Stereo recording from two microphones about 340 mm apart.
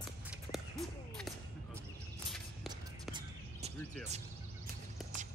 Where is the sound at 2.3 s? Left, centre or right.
Centre.